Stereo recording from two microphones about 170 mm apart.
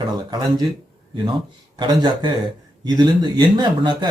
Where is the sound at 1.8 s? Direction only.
25° right (ahead or behind).